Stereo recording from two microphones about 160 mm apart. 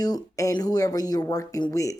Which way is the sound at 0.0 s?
20° left (ahead or behind).